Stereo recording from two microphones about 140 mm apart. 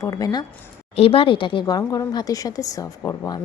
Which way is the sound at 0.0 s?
25° left (ahead or behind).